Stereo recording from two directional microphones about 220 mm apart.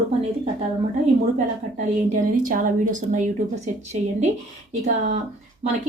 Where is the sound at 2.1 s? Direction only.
40° right (ahead or behind).